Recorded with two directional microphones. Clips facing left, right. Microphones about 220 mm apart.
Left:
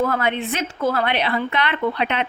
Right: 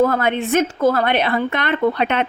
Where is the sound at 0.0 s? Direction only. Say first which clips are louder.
Right 4 dB; 45° right (ahead or behind).